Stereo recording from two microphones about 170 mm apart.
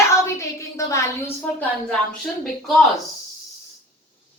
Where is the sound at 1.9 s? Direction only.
Centre (ahead or behind).